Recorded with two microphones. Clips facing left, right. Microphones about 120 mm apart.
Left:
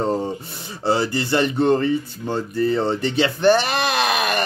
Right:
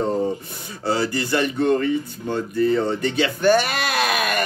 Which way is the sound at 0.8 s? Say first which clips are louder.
Left 2 dB; 25° left (ahead or behind).